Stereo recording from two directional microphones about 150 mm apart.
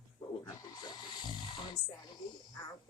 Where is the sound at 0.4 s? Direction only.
30° left (ahead or behind).